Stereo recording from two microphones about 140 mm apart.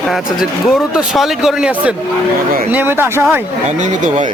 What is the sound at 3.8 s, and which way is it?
Speech, 60° right (ahead or behind).